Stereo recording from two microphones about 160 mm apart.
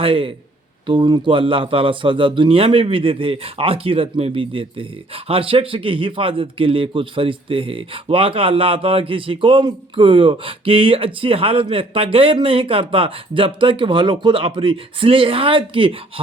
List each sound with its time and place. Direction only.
0.0 s a man's voice: 35° right (ahead or behind)